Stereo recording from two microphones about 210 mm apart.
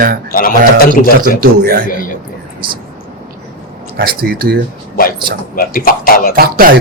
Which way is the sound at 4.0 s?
45° right (ahead or behind).